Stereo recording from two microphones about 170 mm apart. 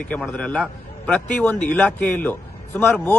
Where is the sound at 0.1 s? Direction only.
5° left (ahead or behind).